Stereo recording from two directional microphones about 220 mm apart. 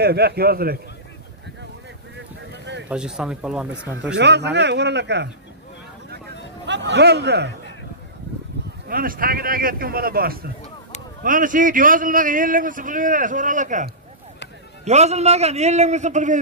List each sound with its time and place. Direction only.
0.0 s a man's voice: 45° right (ahead or behind)
2.5 s a sound: 55° right (ahead or behind)
2.9 s speech: 5° right (ahead or behind)
4.2 s a man's voice: 50° right (ahead or behind)
6.6 s a man's voice: 55° right (ahead or behind)
8.8 s a man's voice: 40° right (ahead or behind)